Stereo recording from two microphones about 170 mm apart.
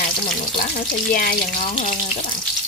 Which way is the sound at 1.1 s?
55° left (ahead or behind).